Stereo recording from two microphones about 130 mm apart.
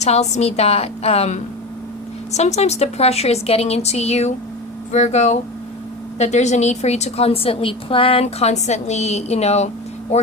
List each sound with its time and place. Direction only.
0.0 s a woman's voice: 60° left (ahead or behind)